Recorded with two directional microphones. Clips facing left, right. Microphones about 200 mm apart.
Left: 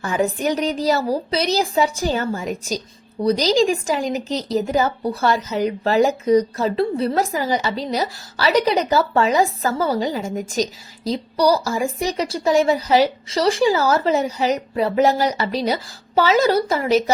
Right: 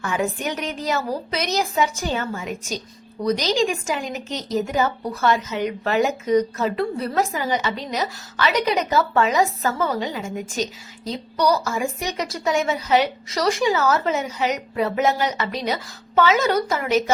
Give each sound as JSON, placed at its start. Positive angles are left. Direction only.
{"t": 0.0, "sound": "a woman's voice", "side_deg": 35}